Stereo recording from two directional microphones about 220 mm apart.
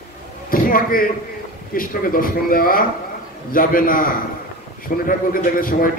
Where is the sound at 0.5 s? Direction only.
40° left (ahead or behind).